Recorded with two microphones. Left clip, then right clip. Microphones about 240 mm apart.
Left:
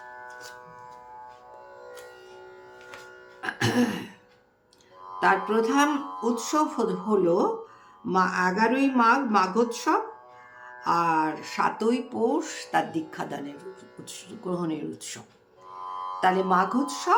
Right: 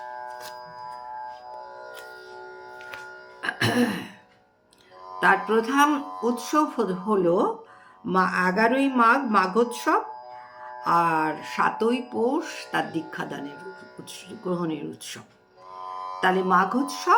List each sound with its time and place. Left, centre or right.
0.0 s music: right
3.4 s music: centre
5.5 s speech: centre
15.8 s music: right
16.2 s speech: centre